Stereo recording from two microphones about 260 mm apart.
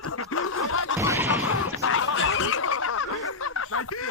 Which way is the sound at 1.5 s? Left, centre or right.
Left.